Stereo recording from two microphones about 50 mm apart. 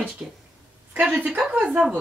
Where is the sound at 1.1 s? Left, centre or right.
Right.